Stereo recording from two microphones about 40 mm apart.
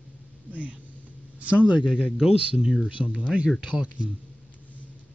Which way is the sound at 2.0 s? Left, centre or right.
Centre.